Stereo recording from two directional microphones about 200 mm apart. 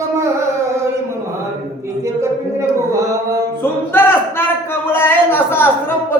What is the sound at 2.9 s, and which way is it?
Mantra, 15° right (ahead or behind).